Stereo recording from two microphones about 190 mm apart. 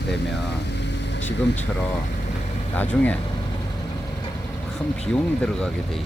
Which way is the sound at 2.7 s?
10° left (ahead or behind).